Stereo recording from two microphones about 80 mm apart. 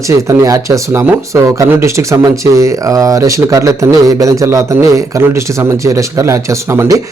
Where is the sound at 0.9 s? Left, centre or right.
Right.